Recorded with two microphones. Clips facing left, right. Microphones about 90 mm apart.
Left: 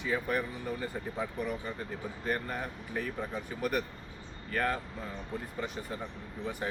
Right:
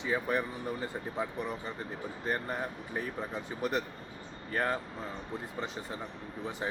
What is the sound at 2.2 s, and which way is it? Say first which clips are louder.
Speech: right 1 dB; 25° right (ahead or behind).